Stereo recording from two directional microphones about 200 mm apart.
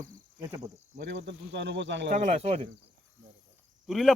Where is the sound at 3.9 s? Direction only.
Centre (ahead or behind).